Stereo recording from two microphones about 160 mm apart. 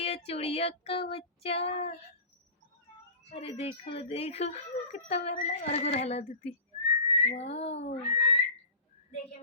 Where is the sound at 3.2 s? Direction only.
40° left (ahead or behind).